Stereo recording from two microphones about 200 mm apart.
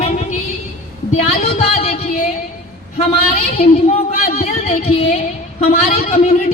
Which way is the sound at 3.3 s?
35° left (ahead or behind).